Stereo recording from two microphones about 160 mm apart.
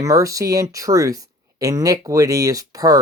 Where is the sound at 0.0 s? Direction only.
20° right (ahead or behind).